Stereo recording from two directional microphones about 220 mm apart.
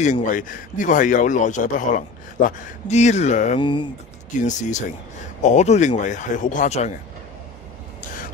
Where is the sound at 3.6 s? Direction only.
20° left (ahead or behind).